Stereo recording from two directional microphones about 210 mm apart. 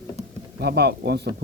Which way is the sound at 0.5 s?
50° right (ahead or behind).